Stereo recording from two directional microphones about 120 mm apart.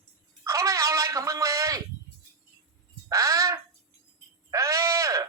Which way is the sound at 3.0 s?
25° right (ahead or behind).